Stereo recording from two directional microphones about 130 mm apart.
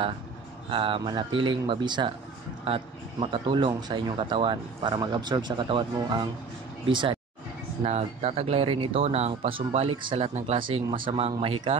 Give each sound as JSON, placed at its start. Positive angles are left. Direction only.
{"t": 0.7, "sound": "speech", "side_deg": -45}
{"t": 2.6, "sound": "speech", "side_deg": -45}
{"t": 7.8, "sound": "speech", "side_deg": -55}